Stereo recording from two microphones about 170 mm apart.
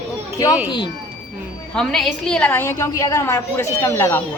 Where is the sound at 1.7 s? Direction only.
5° left (ahead or behind).